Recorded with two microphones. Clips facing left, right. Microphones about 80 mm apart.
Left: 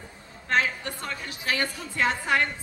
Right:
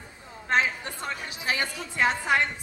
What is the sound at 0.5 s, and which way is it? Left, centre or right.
A woman's voice, right.